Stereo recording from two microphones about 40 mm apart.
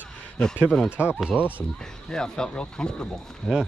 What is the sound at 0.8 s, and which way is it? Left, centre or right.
Speech, right.